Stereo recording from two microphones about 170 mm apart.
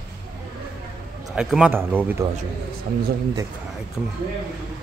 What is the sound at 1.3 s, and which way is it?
Speech, 5° right (ahead or behind).